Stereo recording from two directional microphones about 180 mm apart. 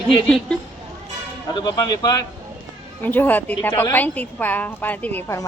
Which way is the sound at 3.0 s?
10° left (ahead or behind).